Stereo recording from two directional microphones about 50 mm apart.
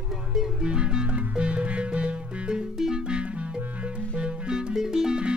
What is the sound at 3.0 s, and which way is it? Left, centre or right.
Music, right.